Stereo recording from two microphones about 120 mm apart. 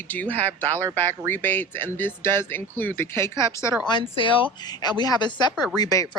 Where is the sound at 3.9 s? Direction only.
40° left (ahead or behind).